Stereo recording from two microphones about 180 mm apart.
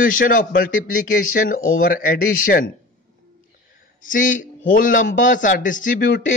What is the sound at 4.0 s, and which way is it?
A man's voice, 45° left (ahead or behind).